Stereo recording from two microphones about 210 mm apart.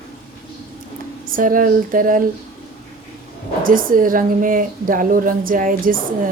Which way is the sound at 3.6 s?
40° right (ahead or behind).